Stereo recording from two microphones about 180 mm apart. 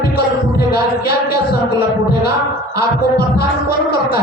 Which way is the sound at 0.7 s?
60° left (ahead or behind).